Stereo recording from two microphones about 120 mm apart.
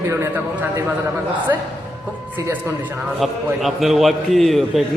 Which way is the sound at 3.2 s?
Centre (ahead or behind).